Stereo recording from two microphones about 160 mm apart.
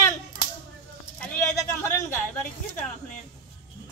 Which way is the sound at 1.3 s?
20° left (ahead or behind).